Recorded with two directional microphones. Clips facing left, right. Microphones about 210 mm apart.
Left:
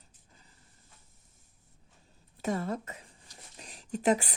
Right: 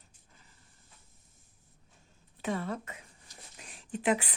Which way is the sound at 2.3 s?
40° left (ahead or behind).